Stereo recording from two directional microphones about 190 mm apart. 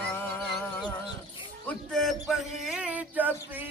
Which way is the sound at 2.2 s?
5° right (ahead or behind).